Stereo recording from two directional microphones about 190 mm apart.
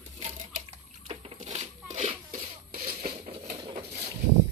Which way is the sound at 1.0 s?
30° right (ahead or behind).